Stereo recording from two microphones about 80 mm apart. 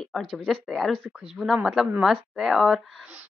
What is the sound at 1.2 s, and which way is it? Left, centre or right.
Speech, centre.